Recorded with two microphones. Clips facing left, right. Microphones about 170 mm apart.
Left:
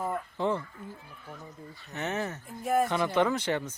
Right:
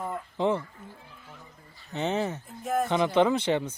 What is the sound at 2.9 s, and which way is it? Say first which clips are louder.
Speech: right 4 dB; 20° right (ahead or behind).